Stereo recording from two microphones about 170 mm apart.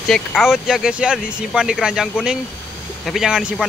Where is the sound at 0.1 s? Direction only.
Centre (ahead or behind).